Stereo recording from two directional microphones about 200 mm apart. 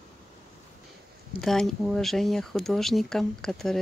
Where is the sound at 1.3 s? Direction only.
Centre (ahead or behind).